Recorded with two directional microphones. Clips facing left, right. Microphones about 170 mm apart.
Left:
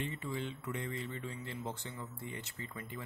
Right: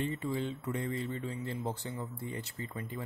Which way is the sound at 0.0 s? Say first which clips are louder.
Right 5 dB; 35° right (ahead or behind).